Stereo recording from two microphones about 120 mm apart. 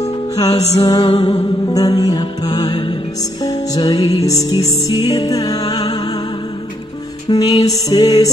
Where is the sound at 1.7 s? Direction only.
30° left (ahead or behind).